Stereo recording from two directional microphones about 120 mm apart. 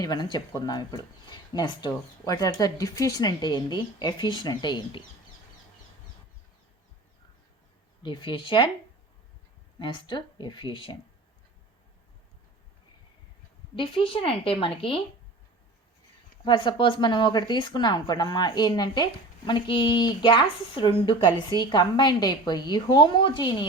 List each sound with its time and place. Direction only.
0.0 s speech: 35° left (ahead or behind)
8.0 s a woman's voice: 40° left (ahead or behind)
9.7 s speech: 40° left (ahead or behind)
13.7 s a woman's voice: 50° left (ahead or behind)
16.4 s speech: 40° left (ahead or behind)